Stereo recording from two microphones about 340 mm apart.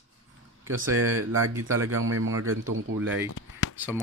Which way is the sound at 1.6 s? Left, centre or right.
Right.